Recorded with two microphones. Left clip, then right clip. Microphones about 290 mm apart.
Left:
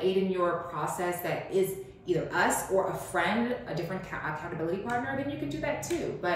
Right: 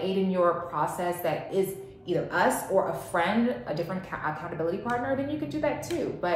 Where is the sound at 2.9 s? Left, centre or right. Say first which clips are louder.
Right 2 dB; centre.